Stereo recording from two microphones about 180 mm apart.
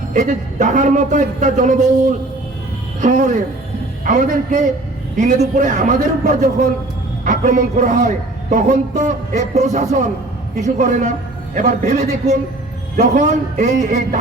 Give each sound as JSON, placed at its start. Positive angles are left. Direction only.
{"t": 0.1, "sound": "a man's voice", "side_deg": -45}